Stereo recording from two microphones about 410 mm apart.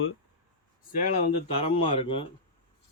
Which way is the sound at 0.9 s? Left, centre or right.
Centre.